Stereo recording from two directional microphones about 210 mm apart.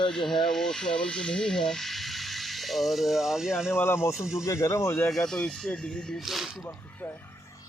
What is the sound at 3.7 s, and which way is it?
Speech, 10° left (ahead or behind).